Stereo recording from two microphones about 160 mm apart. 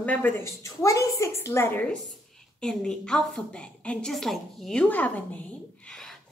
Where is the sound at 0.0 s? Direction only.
10° left (ahead or behind).